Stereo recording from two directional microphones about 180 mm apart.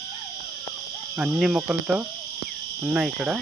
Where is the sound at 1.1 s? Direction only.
5° right (ahead or behind).